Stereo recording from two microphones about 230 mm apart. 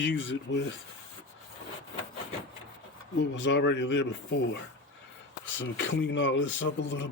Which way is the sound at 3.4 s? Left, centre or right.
Left.